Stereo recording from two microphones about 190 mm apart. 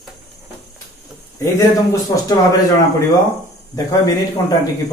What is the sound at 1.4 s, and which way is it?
Speech, 15° left (ahead or behind).